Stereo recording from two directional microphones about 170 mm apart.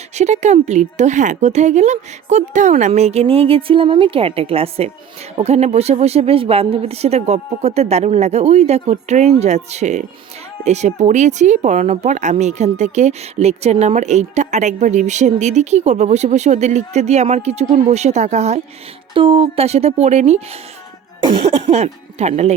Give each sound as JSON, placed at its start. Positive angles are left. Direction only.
{"t": 0.2, "sound": "speech", "side_deg": -40}
{"t": 19.1, "sound": "speech", "side_deg": -30}